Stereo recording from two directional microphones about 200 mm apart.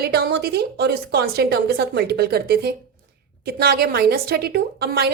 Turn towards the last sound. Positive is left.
turn(degrees=-50)  # may be behind; listen again after turning